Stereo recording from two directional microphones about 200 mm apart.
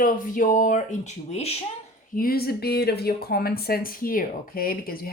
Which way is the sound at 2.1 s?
45° left (ahead or behind).